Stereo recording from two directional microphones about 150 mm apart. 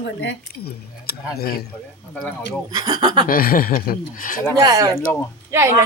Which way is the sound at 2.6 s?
25° right (ahead or behind).